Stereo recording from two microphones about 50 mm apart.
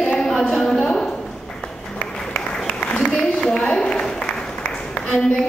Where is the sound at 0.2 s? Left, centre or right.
Centre.